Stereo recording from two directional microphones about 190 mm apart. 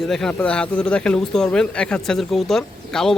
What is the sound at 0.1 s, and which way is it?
Speech, 5° left (ahead or behind).